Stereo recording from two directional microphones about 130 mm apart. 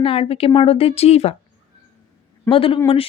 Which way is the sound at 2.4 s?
45° left (ahead or behind).